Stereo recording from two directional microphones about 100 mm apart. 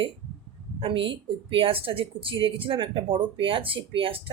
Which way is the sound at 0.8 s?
60° right (ahead or behind).